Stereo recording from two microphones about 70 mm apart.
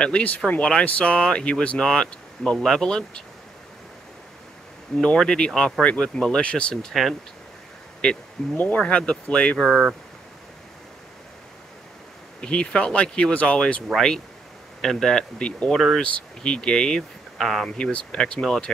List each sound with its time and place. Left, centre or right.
0.0 s speech: centre
4.9 s speech: centre
9.7 s speech: centre
12.4 s speech: centre
17.6 s speech: centre